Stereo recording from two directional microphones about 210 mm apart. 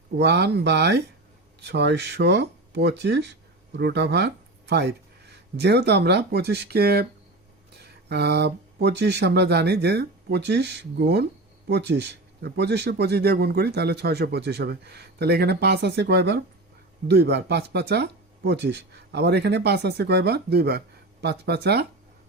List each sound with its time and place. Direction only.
0.2 s speech: 55° right (ahead or behind)